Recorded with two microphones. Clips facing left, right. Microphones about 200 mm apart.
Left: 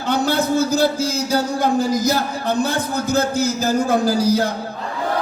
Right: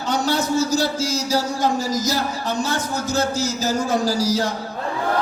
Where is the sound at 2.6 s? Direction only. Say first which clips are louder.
Left 3 dB; 55° left (ahead or behind).